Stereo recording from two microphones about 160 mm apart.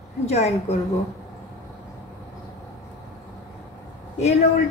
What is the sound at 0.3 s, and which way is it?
Speech, 40° left (ahead or behind).